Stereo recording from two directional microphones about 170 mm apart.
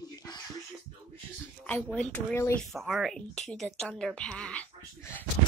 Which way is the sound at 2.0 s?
10° left (ahead or behind).